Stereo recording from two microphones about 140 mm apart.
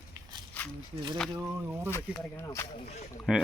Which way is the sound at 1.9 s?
20° left (ahead or behind).